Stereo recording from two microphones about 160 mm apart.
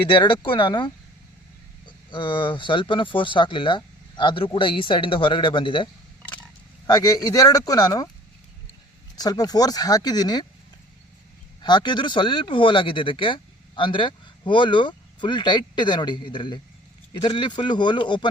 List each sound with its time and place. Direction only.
0.0 s speech: 30° left (ahead or behind)
2.0 s speech: 30° left (ahead or behind)
9.1 s speech: 25° left (ahead or behind)
11.6 s speech: 25° left (ahead or behind)